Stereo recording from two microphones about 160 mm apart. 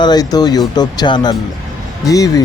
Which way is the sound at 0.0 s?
25° left (ahead or behind).